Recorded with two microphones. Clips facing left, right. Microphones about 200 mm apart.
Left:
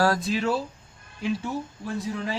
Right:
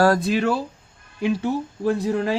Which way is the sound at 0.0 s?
55° right (ahead or behind).